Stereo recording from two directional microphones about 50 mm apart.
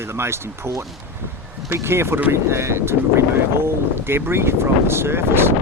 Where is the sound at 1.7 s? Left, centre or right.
Right.